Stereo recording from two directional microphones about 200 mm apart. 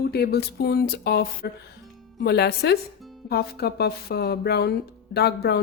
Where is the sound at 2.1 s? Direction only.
55° left (ahead or behind).